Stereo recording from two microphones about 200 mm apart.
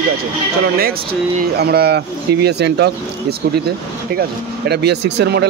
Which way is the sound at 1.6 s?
55° right (ahead or behind).